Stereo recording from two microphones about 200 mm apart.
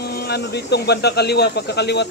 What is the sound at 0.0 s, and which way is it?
Speech, 55° left (ahead or behind).